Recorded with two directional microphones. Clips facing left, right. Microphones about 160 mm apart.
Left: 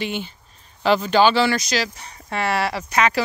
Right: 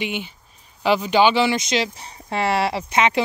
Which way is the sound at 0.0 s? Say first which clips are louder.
Even; 15° right (ahead or behind).